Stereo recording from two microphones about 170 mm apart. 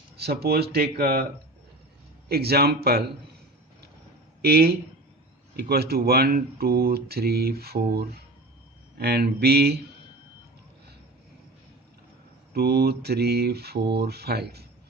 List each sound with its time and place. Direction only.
0.2 s speech: 70° right (ahead or behind)
2.3 s speech: 70° right (ahead or behind)
4.4 s speech: 70° right (ahead or behind)
12.5 s speech: 70° right (ahead or behind)